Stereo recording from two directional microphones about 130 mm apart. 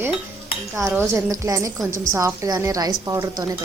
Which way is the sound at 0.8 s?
20° right (ahead or behind).